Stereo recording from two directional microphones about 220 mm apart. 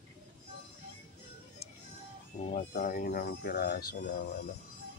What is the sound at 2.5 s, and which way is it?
Speech, 35° left (ahead or behind).